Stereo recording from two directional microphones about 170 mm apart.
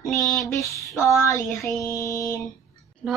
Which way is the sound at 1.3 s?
15° left (ahead or behind).